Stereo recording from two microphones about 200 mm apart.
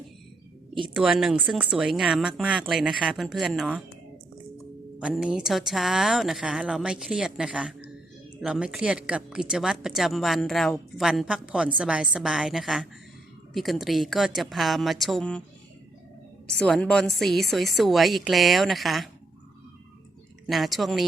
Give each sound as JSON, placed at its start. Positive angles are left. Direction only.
{"t": 0.9, "sound": "a woman's voice", "side_deg": -5}
{"t": 4.9, "sound": "a woman's voice", "side_deg": -5}
{"t": 16.5, "sound": "a woman's voice", "side_deg": 5}
{"t": 20.5, "sound": "a woman's voice", "side_deg": 0}